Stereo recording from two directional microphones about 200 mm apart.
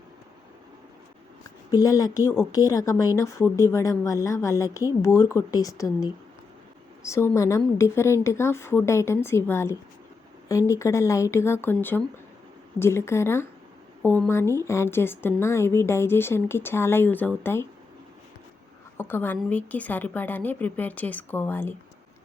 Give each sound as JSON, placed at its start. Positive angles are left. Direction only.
{"t": 1.7, "sound": "a woman's voice", "side_deg": 15}
{"t": 18.9, "sound": "a woman's voice", "side_deg": 10}